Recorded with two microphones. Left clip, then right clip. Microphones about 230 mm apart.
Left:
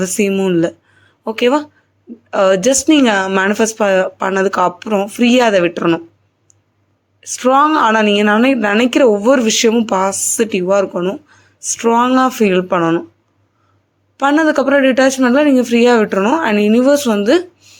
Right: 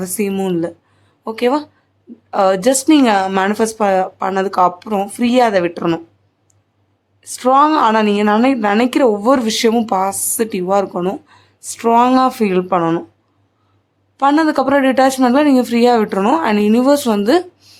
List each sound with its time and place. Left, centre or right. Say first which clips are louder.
0.0 s a woman's voice: left 4 dB; centre
7.3 s a woman's voice: even; centre
14.2 s a woman's voice: left 1 dB; centre